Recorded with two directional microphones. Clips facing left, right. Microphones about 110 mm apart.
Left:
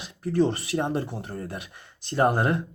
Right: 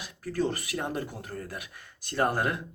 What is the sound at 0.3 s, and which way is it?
Speech, 30° left (ahead or behind).